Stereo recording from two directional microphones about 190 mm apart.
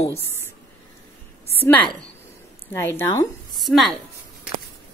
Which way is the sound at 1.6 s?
10° left (ahead or behind).